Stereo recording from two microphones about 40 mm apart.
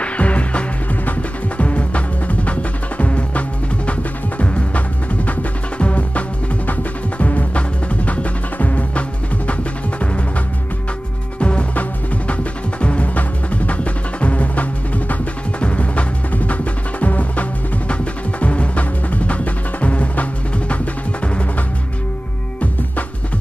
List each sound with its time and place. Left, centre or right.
0.0 s music: left
11.3 s music: left
12.8 s music: left